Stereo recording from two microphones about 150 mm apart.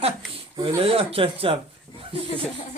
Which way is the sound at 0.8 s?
40° right (ahead or behind).